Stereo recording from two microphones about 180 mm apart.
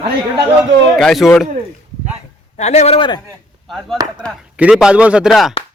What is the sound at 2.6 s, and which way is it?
Speech, 40° left (ahead or behind).